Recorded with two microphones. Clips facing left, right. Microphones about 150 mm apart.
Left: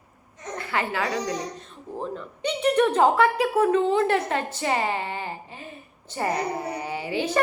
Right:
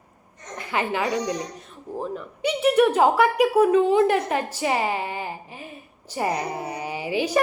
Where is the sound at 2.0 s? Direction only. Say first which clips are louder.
Right 2 dB; 5° right (ahead or behind).